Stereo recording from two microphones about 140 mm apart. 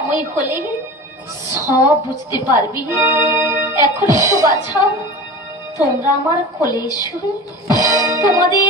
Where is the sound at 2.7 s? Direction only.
15° right (ahead or behind).